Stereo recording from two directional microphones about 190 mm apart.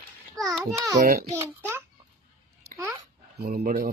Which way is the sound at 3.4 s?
50° right (ahead or behind).